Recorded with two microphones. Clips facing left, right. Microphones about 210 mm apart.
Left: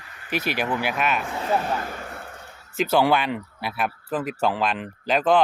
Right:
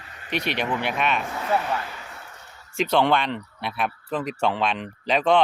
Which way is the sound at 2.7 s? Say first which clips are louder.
Left 1 dB; 5° left (ahead or behind).